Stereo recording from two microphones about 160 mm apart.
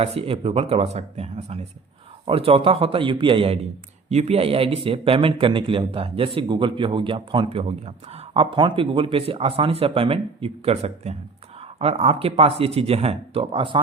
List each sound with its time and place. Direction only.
0.0 s speech: 35° right (ahead or behind)